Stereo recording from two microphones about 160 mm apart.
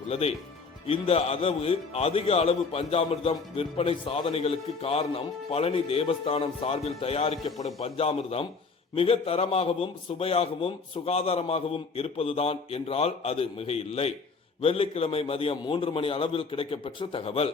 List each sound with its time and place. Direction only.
0.1 s speech: 40° left (ahead or behind)